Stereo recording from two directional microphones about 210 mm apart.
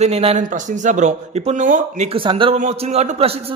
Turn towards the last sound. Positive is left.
turn(degrees=-30)  # may be behind; listen again after turning